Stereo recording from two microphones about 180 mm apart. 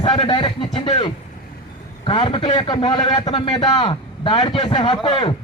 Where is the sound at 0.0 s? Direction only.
25° left (ahead or behind).